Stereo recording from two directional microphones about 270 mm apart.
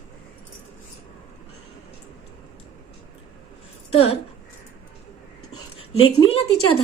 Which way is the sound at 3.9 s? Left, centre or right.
Left.